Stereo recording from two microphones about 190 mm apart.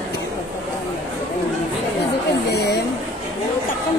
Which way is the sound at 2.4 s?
60° left (ahead or behind).